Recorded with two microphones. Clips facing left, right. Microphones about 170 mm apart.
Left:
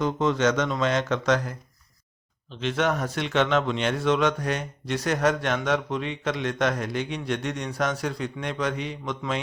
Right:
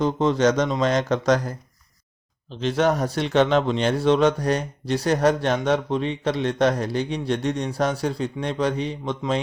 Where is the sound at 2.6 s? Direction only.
35° right (ahead or behind).